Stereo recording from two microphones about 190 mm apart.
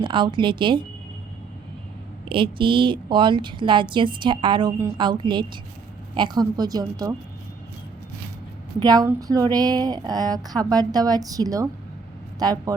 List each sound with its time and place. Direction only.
0.0 s speech: 25° right (ahead or behind)
2.3 s speech: 25° right (ahead or behind)
8.8 s speech: 20° right (ahead or behind)